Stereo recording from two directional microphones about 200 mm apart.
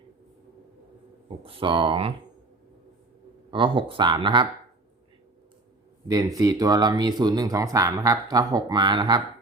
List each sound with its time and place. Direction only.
1.5 s speech: 25° right (ahead or behind)
3.5 s speech: 25° right (ahead or behind)
6.1 s speech: 15° right (ahead or behind)